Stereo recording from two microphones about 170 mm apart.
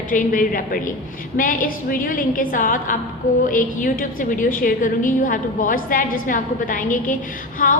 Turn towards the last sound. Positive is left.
turn(degrees=50)  # may be behind; listen again after turning